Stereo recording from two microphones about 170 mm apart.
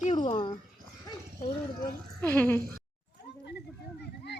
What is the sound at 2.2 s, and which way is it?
Speech, 10° left (ahead or behind).